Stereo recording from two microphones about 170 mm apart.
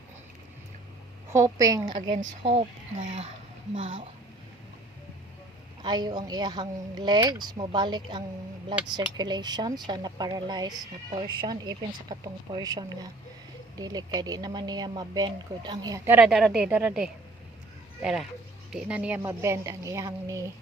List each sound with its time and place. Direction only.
1.3 s speech: 20° right (ahead or behind)
2.4 s speech: 35° right (ahead or behind)
5.8 s speech: 25° right (ahead or behind)
16.0 s a woman's voice: 10° right (ahead or behind)